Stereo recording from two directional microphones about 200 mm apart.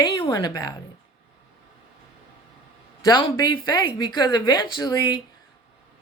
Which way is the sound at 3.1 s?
25° left (ahead or behind).